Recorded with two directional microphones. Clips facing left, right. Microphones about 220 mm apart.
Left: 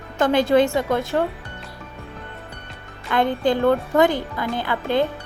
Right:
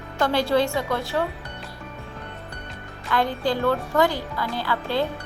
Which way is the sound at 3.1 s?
20° left (ahead or behind).